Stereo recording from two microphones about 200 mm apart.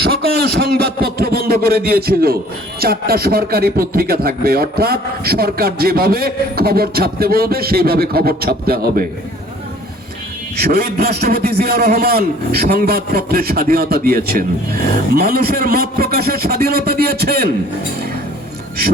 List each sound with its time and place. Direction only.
0.0 s speech: 50° right (ahead or behind)
10.6 s speech: 50° right (ahead or behind)